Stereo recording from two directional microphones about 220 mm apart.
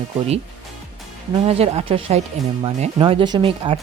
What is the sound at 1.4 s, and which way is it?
Speech, 25° right (ahead or behind).